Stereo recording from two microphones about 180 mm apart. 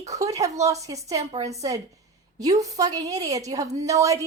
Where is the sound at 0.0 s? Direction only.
20° right (ahead or behind).